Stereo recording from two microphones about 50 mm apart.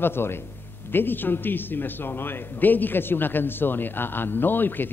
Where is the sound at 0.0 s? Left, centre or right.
Left.